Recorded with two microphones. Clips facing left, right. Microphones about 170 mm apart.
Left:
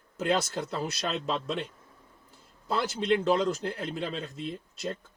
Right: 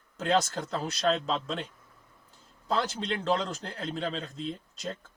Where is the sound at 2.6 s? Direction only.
5° left (ahead or behind).